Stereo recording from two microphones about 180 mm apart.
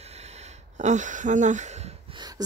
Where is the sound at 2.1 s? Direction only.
20° right (ahead or behind).